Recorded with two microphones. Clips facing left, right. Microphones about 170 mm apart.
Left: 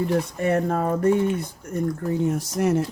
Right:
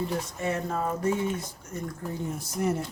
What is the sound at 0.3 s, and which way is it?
Speech, 60° left (ahead or behind).